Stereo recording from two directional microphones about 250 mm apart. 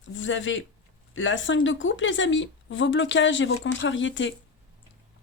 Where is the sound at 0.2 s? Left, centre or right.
Left.